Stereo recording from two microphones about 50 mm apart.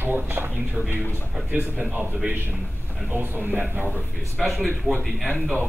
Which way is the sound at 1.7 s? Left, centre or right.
Right.